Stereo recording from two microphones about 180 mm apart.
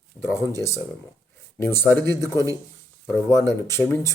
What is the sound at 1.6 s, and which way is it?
Speech, 10° left (ahead or behind).